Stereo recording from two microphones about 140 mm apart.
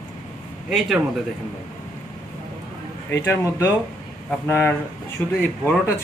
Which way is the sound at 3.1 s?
15° left (ahead or behind).